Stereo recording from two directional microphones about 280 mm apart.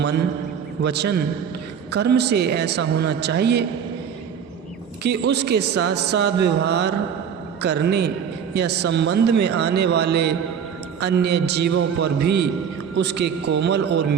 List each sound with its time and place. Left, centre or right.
0.8 s a man's voice: right
5.0 s a man's voice: right